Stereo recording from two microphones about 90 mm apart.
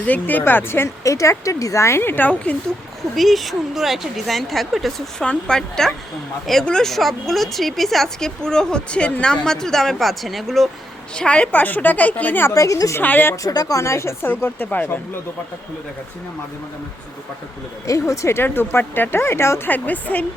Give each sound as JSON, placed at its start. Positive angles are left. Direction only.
{"t": 0.0, "sound": "speech", "side_deg": 20}
{"t": 3.2, "sound": "a woman's voice", "side_deg": 0}
{"t": 11.1, "sound": "a woman's voice", "side_deg": 10}
{"t": 12.5, "sound": "speech", "side_deg": 40}
{"t": 13.0, "sound": "speech", "side_deg": 20}
{"t": 13.3, "sound": "speech", "side_deg": 40}
{"t": 18.1, "sound": "speech", "side_deg": 30}